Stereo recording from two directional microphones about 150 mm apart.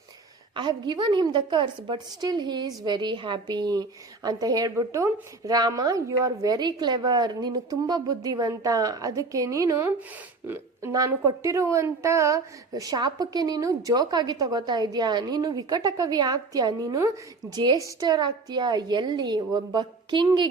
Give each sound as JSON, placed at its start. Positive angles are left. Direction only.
{"t": 0.5, "sound": "a woman's voice", "side_deg": -30}